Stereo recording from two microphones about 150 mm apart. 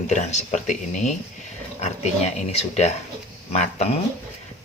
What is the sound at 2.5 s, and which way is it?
Speech, 45° left (ahead or behind).